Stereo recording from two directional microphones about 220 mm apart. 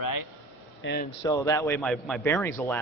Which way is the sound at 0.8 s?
50° left (ahead or behind).